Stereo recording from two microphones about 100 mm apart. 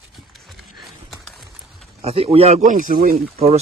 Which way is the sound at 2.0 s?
85° right.